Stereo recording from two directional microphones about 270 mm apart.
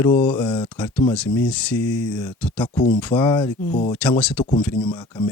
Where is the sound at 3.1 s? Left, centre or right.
Centre.